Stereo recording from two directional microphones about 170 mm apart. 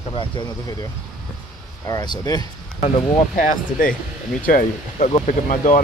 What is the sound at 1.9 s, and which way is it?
Speech, 20° left (ahead or behind).